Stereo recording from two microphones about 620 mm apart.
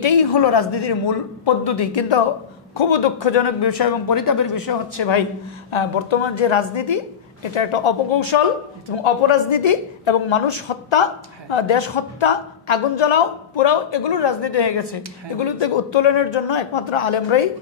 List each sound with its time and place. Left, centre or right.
0.0 s a man's voice: left